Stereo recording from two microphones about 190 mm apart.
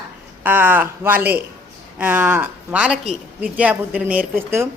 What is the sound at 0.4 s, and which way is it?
A woman's voice, 10° right (ahead or behind).